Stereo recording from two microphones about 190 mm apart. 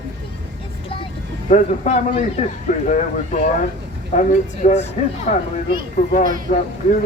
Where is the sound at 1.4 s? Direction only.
40° left (ahead or behind).